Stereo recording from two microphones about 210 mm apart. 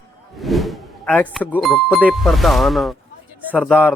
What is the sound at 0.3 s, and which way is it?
Speech, centre (ahead or behind).